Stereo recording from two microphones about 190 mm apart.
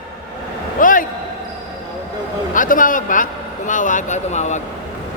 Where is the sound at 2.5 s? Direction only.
45° left (ahead or behind).